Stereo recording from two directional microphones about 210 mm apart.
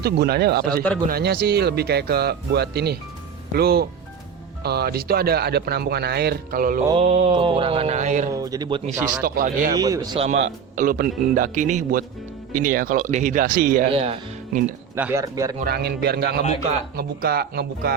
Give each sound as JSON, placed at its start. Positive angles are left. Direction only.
{"t": 0.0, "sound": "speech", "side_deg": -50}
{"t": 6.8, "sound": "music", "side_deg": -25}
{"t": 8.3, "sound": "speech", "side_deg": -15}
{"t": 9.2, "sound": "speech", "side_deg": -45}
{"t": 9.7, "sound": "speech", "side_deg": -15}
{"t": 10.2, "sound": "speech", "side_deg": -30}
{"t": 13.9, "sound": "speech", "side_deg": -30}
{"t": 14.9, "sound": "speech", "side_deg": -10}
{"t": 15.6, "sound": "speech", "side_deg": -50}